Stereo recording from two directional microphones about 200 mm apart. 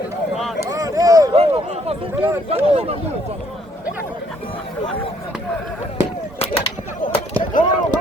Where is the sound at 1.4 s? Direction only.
30° right (ahead or behind).